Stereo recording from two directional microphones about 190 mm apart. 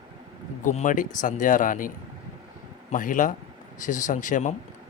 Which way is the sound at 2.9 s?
45° left (ahead or behind).